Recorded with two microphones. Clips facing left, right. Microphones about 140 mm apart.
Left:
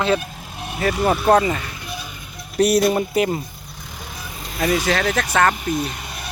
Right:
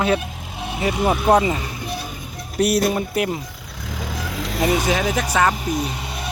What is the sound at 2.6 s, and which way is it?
Speech, 5° right (ahead or behind).